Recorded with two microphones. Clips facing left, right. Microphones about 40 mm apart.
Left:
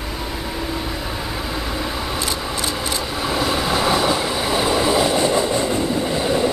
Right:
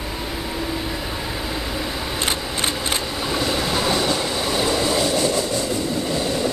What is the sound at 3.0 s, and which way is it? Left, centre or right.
Train, centre.